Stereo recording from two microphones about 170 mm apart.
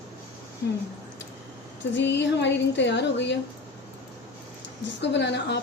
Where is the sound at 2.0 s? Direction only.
90° left.